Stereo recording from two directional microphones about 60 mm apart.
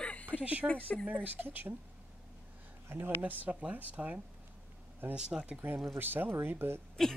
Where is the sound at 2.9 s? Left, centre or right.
Right.